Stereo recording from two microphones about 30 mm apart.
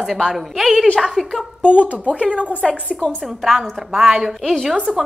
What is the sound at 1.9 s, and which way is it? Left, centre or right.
Speech, right.